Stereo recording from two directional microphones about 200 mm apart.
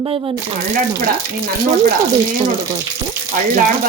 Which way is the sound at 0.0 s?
30° right (ahead or behind).